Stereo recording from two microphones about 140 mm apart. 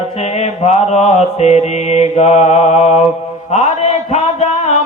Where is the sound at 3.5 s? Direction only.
50° left (ahead or behind).